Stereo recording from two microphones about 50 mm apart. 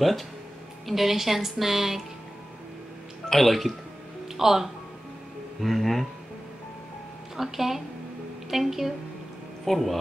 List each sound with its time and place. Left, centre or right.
0.8 s speech: centre
3.3 s speech: centre
7.3 s speech: centre